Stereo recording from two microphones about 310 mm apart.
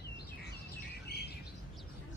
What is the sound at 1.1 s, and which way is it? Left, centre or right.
Bird, left.